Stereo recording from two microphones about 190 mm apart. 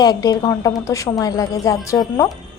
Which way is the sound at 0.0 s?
20° left (ahead or behind).